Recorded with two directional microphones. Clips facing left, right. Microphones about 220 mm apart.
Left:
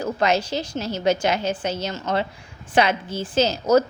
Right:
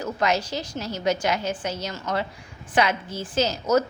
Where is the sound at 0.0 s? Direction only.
25° left (ahead or behind).